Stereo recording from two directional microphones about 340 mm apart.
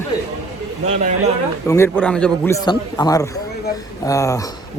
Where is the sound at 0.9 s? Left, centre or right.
Centre.